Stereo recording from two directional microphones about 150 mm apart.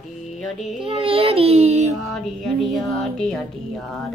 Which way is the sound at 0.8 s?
40° right (ahead or behind).